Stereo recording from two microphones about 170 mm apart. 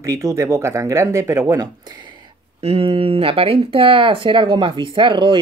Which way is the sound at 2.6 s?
35° right (ahead or behind).